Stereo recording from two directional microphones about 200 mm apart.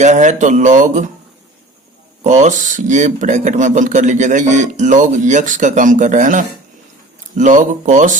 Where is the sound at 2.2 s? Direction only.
35° right (ahead or behind).